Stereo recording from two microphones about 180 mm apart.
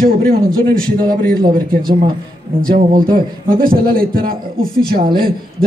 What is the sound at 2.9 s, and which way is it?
A man's voice, 50° right (ahead or behind).